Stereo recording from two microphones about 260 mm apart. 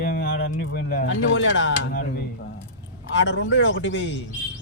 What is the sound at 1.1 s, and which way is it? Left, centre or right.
Speech, left.